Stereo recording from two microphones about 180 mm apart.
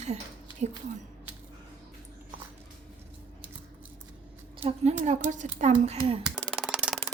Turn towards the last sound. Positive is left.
turn(degrees=0)  # may be behind; listen again after turning